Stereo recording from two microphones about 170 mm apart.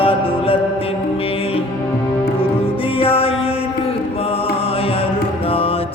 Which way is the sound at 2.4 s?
30° left (ahead or behind).